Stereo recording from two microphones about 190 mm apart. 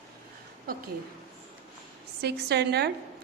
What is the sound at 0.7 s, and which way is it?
Speech, 50° right (ahead or behind).